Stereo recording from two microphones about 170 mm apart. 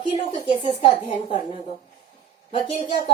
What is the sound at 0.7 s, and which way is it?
Speech, 35° left (ahead or behind).